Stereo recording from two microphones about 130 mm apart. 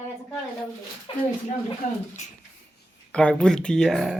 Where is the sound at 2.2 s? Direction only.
65° left (ahead or behind).